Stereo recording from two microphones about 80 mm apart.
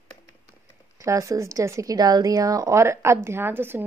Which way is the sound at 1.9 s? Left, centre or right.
Right.